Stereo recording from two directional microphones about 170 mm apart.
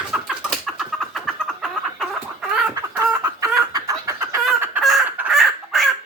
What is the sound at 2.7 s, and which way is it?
Chicken, 20° right (ahead or behind).